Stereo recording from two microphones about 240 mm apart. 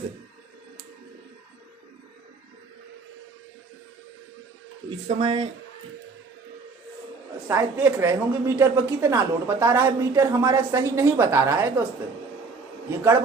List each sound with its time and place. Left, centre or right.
4.9 s speech: right
7.4 s a woman's voice: centre